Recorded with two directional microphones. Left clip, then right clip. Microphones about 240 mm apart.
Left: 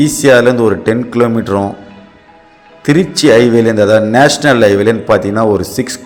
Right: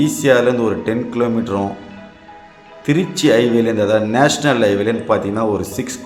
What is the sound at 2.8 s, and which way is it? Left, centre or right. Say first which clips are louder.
Speech: left 6 dB; left.